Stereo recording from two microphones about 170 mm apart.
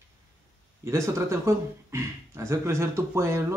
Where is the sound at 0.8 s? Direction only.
15° right (ahead or behind).